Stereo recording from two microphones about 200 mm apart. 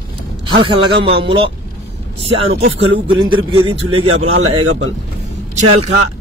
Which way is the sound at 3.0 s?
25° right (ahead or behind).